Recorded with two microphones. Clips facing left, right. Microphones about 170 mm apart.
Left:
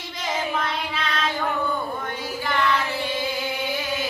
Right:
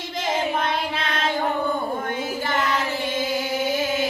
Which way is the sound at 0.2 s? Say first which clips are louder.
Right 3 dB; 50° right (ahead or behind).